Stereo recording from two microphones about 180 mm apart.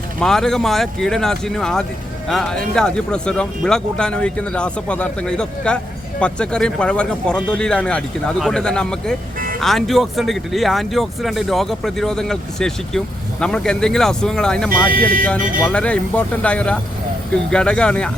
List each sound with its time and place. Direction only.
0.2 s speech: centre (ahead or behind)
14.7 s speech: 50° right (ahead or behind)
15.6 s speech: 5° left (ahead or behind)